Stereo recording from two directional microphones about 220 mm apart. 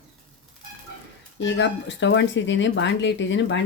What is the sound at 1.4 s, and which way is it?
Speech, 55° left (ahead or behind).